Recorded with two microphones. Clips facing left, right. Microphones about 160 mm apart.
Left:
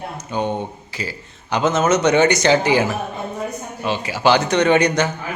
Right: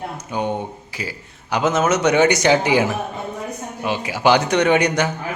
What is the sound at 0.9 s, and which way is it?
Speech, 10° right (ahead or behind).